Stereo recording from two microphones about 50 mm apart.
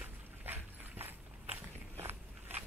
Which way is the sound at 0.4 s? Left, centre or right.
Right.